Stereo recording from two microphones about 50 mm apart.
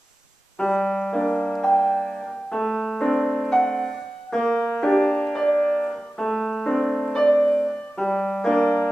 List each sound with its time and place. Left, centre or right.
0.6 s music: centre
7.6 s keyboard: centre